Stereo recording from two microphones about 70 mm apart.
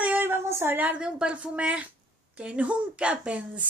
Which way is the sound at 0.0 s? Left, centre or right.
Right.